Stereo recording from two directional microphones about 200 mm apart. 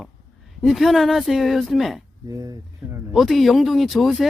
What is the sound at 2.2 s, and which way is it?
Speech, 15° right (ahead or behind).